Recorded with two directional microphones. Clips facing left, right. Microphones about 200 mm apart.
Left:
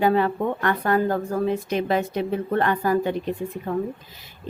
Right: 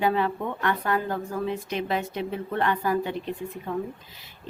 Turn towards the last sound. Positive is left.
turn(degrees=45)  # may be behind; listen again after turning